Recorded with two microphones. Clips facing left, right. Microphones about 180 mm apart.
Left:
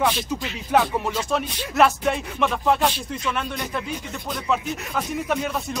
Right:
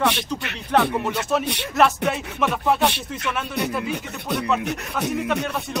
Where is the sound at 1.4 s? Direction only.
70° right (ahead or behind).